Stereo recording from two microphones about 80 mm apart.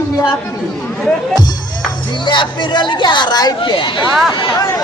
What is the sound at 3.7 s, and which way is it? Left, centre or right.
Speech, left.